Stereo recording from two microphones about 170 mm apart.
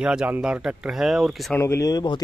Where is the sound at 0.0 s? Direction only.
5° right (ahead or behind).